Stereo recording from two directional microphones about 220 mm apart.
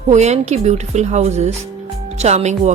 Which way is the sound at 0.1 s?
30° right (ahead or behind).